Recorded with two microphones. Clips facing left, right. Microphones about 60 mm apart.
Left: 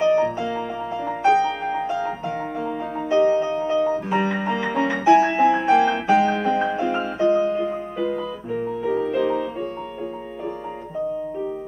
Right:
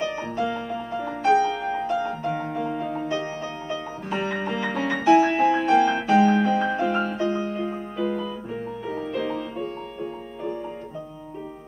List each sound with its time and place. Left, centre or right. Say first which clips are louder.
0.0 s music: left 7 dB; centre
1.3 s music: right 2 dB; left
1.9 s music: even; centre
5.3 s music: left 3 dB; centre
5.7 s music: left 2 dB; centre